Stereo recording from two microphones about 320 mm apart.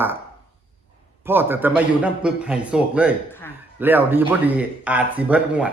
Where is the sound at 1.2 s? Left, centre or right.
Centre.